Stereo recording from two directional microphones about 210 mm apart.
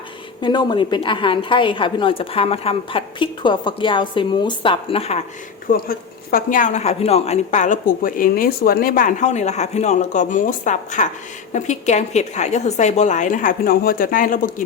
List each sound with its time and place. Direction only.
0.4 s a woman's voice: 20° left (ahead or behind)
5.6 s speech: 45° left (ahead or behind)